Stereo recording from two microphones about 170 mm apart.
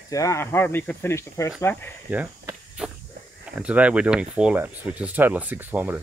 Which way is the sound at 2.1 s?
10° right (ahead or behind).